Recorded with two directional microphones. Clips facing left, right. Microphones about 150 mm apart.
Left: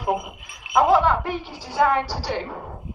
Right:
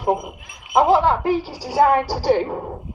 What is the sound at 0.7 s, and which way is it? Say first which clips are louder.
A woman's voice: right 2 dB; 25° right (ahead or behind).